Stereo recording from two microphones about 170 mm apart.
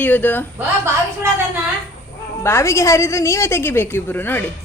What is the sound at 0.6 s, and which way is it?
Speech, 15° right (ahead or behind).